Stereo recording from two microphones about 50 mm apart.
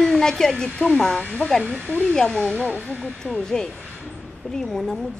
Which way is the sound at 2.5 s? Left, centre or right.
Left.